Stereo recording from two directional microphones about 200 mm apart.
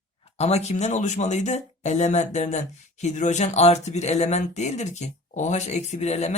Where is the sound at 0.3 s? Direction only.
30° left (ahead or behind).